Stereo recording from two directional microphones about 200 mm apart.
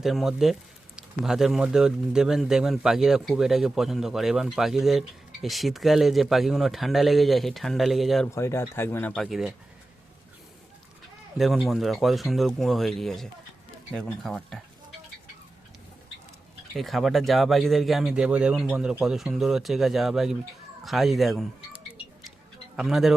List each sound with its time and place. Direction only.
0.0 s a man's voice: centre (ahead or behind)
8.4 s speech: 15° left (ahead or behind)
11.3 s a man's voice: centre (ahead or behind)
16.7 s a man's voice: centre (ahead or behind)